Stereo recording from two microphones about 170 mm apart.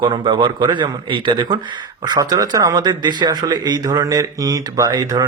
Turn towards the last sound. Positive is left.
turn(degrees=-25)  # may be behind; listen again after turning